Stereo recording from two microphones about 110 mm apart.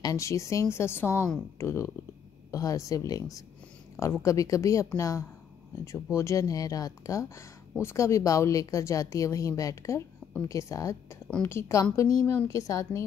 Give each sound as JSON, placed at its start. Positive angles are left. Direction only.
{"t": 0.0, "sound": "speech", "side_deg": 30}